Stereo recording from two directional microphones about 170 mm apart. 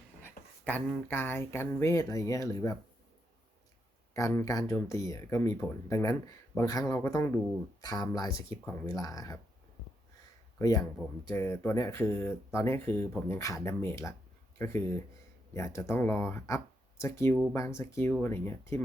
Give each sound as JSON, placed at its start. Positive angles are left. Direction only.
{"t": 0.2, "sound": "speech", "side_deg": 10}
{"t": 4.1, "sound": "speech", "side_deg": 15}
{"t": 10.6, "sound": "speech", "side_deg": 20}